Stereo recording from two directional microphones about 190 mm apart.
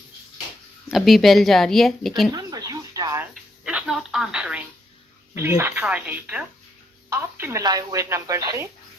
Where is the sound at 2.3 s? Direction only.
20° right (ahead or behind).